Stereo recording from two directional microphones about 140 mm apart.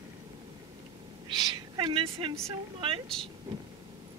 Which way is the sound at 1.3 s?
30° right (ahead or behind).